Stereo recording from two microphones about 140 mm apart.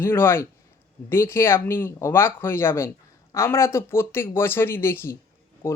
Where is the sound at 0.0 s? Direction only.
15° left (ahead or behind).